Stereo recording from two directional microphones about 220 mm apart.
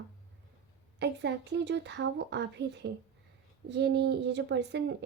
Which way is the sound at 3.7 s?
50° right (ahead or behind).